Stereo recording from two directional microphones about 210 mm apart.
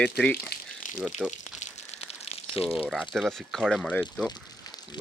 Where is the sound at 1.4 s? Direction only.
35° left (ahead or behind).